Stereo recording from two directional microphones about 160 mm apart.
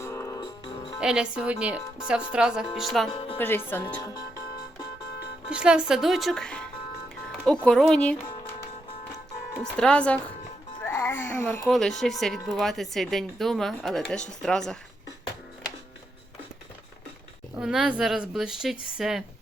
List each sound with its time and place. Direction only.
0.0 s music: 15° left (ahead or behind)
0.9 s speech: 5° right (ahead or behind)
3.1 s speech: 35° left (ahead or behind)
3.3 s speech: 15° left (ahead or behind)
5.5 s speech: 5° right (ahead or behind)
7.7 s speech: 5° left (ahead or behind)
9.7 s speech: 5° left (ahead or behind)
10.9 s babbling: 15° left (ahead or behind)
11.7 s speech: centre (ahead or behind)
17.6 s speech: 5° right (ahead or behind)